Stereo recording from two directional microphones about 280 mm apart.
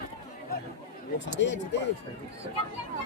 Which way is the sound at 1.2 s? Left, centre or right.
Left.